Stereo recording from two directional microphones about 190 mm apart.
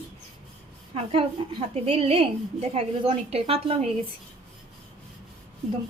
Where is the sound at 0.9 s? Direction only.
30° right (ahead or behind).